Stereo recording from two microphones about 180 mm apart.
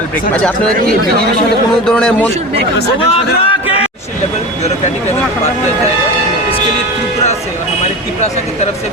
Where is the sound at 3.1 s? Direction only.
30° left (ahead or behind).